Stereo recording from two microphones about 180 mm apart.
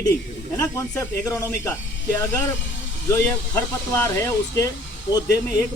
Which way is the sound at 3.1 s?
15° left (ahead or behind).